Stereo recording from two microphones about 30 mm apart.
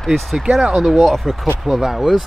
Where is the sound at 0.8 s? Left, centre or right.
Centre.